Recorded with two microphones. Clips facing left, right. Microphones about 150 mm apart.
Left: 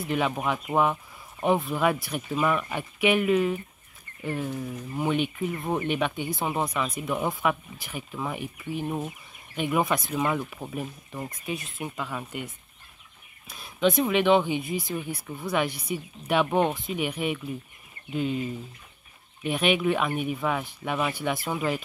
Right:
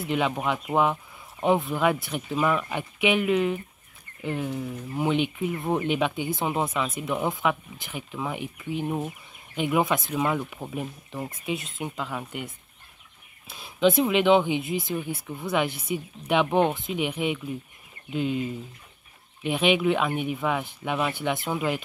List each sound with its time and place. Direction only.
0.0 s speech: centre (ahead or behind)
11.5 s speech: 20° right (ahead or behind)
12.0 s speech: 5° right (ahead or behind)
13.5 s speech: 5° right (ahead or behind)
19.5 s speech: centre (ahead or behind)